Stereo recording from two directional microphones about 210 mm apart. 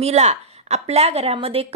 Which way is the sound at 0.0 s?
30° right (ahead or behind).